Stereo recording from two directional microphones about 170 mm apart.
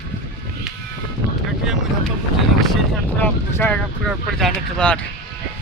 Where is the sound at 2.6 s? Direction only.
5° left (ahead or behind).